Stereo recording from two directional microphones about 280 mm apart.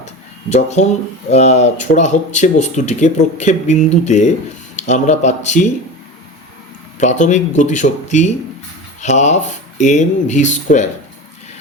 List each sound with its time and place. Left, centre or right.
0.5 s speech: left
7.0 s speech: left